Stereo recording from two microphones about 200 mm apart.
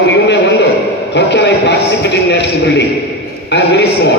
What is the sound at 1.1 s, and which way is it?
A man's voice, 60° left (ahead or behind).